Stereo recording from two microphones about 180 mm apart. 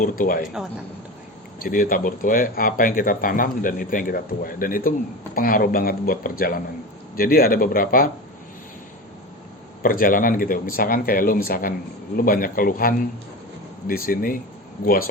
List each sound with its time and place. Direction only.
0.0 s speech: 55° left (ahead or behind)
0.4 s speech: centre (ahead or behind)
1.6 s speech: 50° left (ahead or behind)
9.8 s speech: 50° left (ahead or behind)